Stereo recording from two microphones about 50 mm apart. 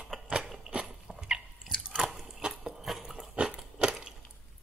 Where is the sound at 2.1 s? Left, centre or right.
Centre.